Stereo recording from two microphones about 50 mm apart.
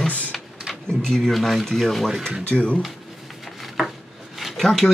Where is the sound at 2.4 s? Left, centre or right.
Left.